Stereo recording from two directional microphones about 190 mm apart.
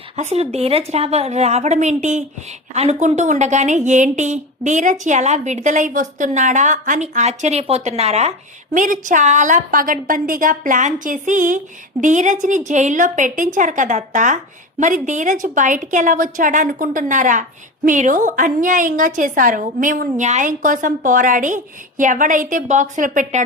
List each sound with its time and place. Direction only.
0.2 s a woman's voice: 35° right (ahead or behind)